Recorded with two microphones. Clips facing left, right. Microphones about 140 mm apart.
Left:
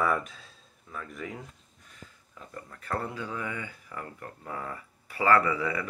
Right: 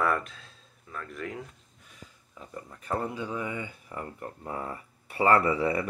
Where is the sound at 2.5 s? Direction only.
15° right (ahead or behind).